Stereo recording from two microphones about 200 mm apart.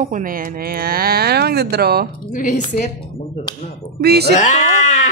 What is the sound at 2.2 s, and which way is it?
Speech, 40° left (ahead or behind).